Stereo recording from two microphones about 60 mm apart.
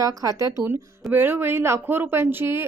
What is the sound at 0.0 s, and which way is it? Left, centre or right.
Speech, right.